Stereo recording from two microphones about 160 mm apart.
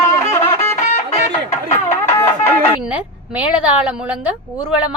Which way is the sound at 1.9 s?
15° left (ahead or behind).